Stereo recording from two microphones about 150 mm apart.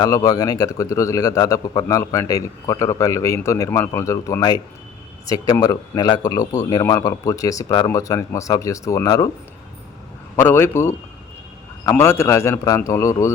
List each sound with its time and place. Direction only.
0.0 s a man's voice: 25° left (ahead or behind)
10.3 s a man's voice: 15° left (ahead or behind)